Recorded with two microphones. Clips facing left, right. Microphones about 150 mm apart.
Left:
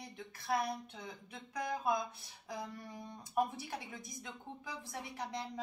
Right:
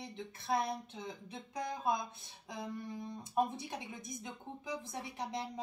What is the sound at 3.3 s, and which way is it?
A woman's voice, 20° right (ahead or behind).